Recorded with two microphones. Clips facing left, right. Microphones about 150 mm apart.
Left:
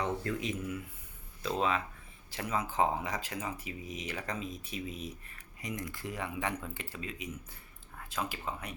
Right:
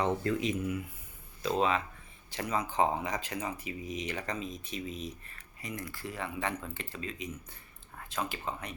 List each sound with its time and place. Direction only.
0.0 s speech: 25° right (ahead or behind)
1.4 s speech: centre (ahead or behind)